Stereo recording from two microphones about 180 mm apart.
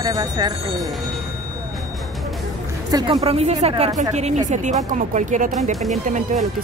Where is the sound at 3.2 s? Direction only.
35° right (ahead or behind).